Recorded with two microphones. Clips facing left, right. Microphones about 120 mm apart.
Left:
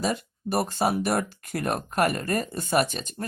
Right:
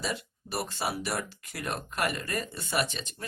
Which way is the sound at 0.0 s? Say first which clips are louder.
Left 7 dB; 45° left (ahead or behind).